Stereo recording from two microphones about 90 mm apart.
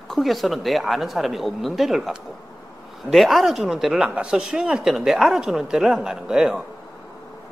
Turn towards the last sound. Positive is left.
turn(degrees=-10)  # may be behind; listen again after turning